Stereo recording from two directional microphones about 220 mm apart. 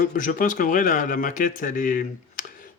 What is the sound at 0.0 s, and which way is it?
Speech, 40° left (ahead or behind).